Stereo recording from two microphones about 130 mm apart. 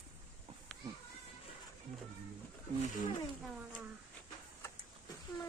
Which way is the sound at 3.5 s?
10° right (ahead or behind).